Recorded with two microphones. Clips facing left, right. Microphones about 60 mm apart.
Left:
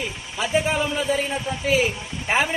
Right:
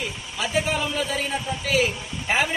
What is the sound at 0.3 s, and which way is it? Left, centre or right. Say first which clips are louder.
A man's voice: left 3 dB; left.